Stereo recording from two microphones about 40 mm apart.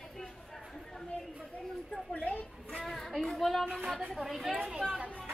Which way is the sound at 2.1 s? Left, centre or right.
Left.